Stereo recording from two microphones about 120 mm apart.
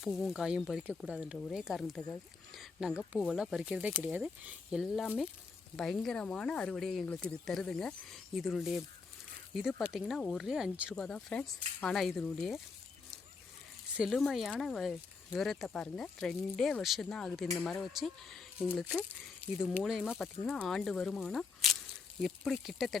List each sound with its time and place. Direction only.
0.0 s speech: centre (ahead or behind)
10.9 s speech: 5° left (ahead or behind)
13.9 s speech: 5° right (ahead or behind)
19.5 s speech: 5° right (ahead or behind)